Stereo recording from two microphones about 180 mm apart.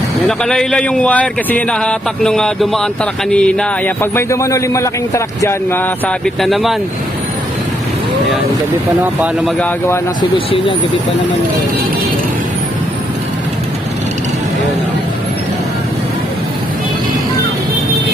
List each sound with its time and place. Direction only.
0.3 s speech: 5° left (ahead or behind)
9.1 s speech: centre (ahead or behind)
10.3 s speech: 30° left (ahead or behind)